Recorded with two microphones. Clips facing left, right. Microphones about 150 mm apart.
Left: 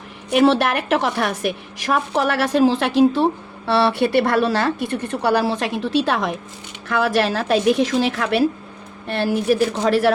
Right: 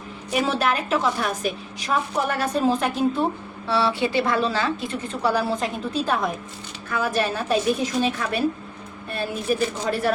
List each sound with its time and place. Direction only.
0.3 s a woman's voice: 70° left (ahead or behind); by 3.2 s 85° left
3.7 s a woman's voice: 65° left (ahead or behind)